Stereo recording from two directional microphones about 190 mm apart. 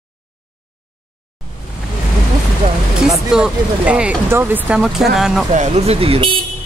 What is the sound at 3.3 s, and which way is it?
Speech, 5° right (ahead or behind).